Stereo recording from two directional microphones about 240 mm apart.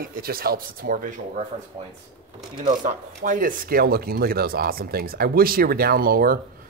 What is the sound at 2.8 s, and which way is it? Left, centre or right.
Speech, right.